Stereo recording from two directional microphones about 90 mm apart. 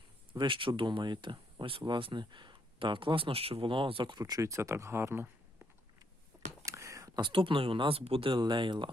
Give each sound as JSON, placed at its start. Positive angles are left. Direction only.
{"t": 0.3, "sound": "speech", "side_deg": -70}
{"t": 6.3, "sound": "a sound", "side_deg": -35}
{"t": 6.7, "sound": "whispering", "side_deg": -35}
{"t": 7.2, "sound": "speech", "side_deg": -70}
{"t": 8.4, "sound": "speech", "side_deg": -60}